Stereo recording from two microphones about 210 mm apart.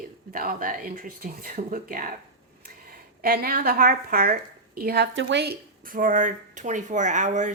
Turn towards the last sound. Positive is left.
turn(degrees=-35)  # may be behind; listen again after turning